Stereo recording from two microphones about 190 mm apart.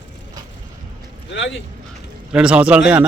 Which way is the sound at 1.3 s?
70° left (ahead or behind).